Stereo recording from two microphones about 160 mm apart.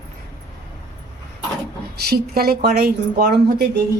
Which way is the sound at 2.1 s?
75° right (ahead or behind).